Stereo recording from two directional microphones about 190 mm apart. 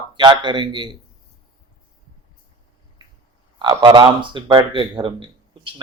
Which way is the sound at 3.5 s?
25° right (ahead or behind).